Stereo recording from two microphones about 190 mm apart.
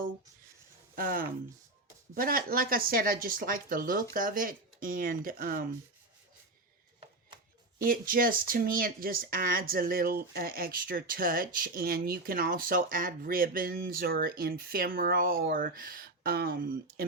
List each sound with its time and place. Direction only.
0.9 s speech: 50° right (ahead or behind)
7.9 s speech: 50° right (ahead or behind)